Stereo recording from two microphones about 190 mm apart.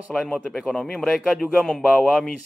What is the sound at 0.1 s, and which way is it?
A man's voice, centre (ahead or behind).